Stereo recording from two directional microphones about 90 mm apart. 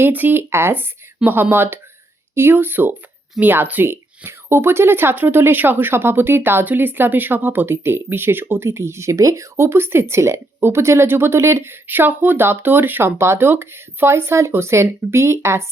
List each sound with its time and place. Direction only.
0.0 s speech: 20° right (ahead or behind)